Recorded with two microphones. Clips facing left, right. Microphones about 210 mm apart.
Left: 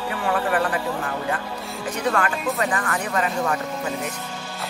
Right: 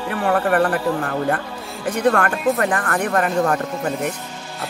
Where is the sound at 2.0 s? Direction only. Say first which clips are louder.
Right 6 dB; 55° right (ahead or behind).